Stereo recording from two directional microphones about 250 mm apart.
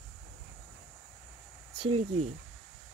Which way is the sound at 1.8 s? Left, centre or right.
Right.